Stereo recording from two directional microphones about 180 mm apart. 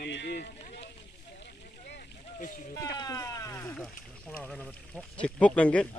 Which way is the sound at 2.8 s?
20° left (ahead or behind).